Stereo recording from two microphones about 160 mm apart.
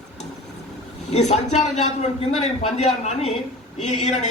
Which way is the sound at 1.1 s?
45° left (ahead or behind).